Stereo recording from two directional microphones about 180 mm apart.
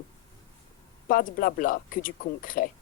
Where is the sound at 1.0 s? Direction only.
50° left (ahead or behind).